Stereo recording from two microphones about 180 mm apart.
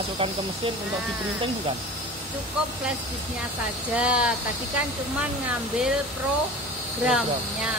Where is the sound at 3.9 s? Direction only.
5° right (ahead or behind).